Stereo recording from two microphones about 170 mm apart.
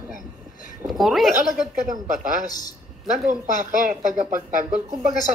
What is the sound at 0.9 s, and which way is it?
Speech, centre (ahead or behind).